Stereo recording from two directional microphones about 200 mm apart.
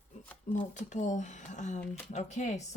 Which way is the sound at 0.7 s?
35° left (ahead or behind).